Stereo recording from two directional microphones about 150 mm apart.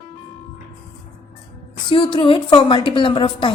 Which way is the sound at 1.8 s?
35° left (ahead or behind).